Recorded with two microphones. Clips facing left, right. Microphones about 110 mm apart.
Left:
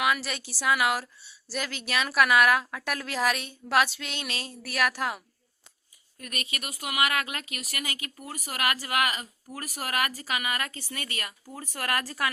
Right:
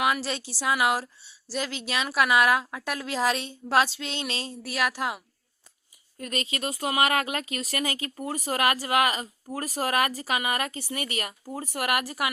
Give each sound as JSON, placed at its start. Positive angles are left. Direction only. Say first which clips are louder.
{"t": 0.0, "sound": "a woman's voice", "louder": "right 2 dB", "side_deg": -30}